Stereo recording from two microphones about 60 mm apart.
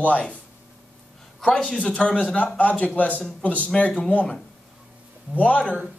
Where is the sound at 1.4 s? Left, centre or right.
Centre.